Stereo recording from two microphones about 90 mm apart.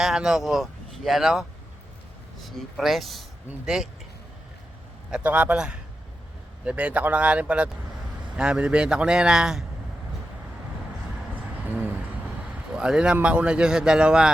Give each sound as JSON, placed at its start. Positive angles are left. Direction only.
{"t": 0.0, "sound": "speech", "side_deg": -5}
{"t": 5.1, "sound": "a man's voice", "side_deg": -15}
{"t": 11.6, "sound": "a sound", "side_deg": -20}
{"t": 12.7, "sound": "a man's voice", "side_deg": -10}